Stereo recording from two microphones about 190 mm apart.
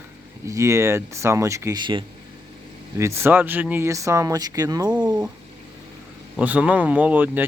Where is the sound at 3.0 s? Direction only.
15° right (ahead or behind).